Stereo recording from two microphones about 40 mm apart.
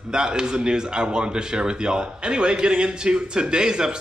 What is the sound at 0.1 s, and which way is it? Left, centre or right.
Speech, centre.